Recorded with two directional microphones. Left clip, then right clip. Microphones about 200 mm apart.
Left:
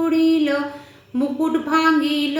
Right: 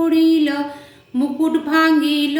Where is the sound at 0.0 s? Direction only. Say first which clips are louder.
Right 3 dB; 20° right (ahead or behind).